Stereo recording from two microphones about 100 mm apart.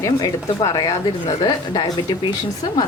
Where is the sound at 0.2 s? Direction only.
35° left (ahead or behind).